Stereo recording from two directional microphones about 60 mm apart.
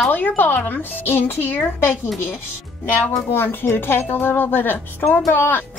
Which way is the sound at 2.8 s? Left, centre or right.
Left.